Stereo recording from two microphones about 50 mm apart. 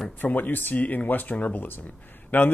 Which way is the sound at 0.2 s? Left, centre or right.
Left.